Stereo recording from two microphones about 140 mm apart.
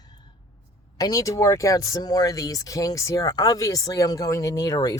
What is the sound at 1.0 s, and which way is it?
Speech, 25° left (ahead or behind).